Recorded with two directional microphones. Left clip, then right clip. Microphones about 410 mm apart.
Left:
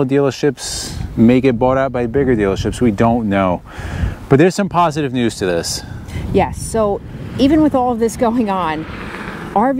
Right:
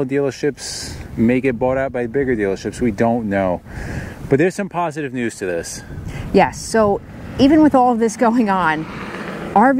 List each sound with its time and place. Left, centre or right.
0.0 s speech: left
6.3 s speech: centre